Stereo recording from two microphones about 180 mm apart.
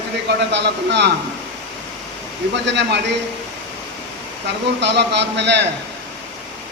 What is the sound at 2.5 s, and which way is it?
Speech, 75° right (ahead or behind).